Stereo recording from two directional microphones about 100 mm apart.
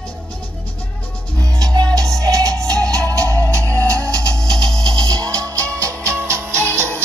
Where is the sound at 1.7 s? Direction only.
40° right (ahead or behind).